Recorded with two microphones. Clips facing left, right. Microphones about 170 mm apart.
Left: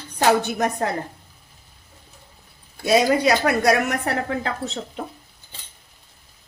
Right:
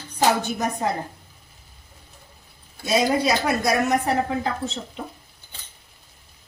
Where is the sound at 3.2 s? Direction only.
65° left (ahead or behind).